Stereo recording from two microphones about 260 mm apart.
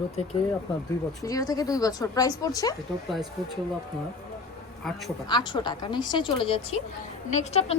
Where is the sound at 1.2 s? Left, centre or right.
Centre.